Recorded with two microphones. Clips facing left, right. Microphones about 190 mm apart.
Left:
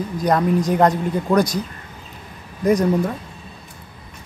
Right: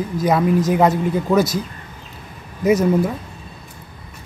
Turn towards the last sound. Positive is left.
turn(degrees=-5)  # may be behind; listen again after turning